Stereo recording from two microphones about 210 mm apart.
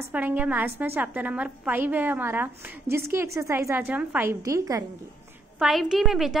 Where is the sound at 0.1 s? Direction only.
5° right (ahead or behind).